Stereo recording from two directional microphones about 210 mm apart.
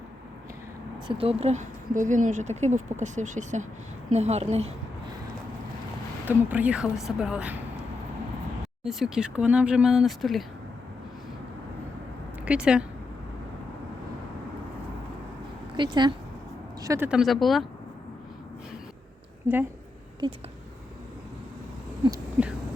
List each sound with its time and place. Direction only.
1.0 s speech: 25° right (ahead or behind)
6.2 s speech: 5° right (ahead or behind)
8.8 s speech: centre (ahead or behind)
12.5 s speech: 5° right (ahead or behind)
15.7 s speech: 20° right (ahead or behind)
17.1 s speech: centre (ahead or behind)
20.2 s speech: 20° right (ahead or behind)
22.4 s heart sounds: 5° right (ahead or behind)